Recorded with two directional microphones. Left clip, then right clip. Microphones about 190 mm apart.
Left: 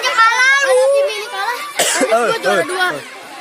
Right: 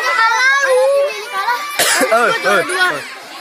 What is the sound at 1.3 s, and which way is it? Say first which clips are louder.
Cough: right 6 dB; 30° left (ahead or behind).